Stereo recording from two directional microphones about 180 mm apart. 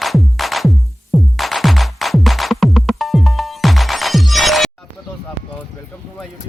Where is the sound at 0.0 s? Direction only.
Centre (ahead or behind).